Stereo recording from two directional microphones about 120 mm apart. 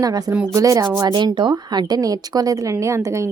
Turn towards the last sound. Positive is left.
turn(degrees=-25)  # may be behind; listen again after turning